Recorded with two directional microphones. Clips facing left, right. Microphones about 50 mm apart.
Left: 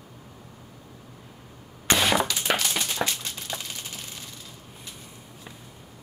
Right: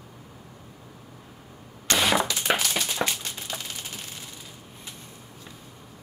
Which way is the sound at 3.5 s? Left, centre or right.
Centre.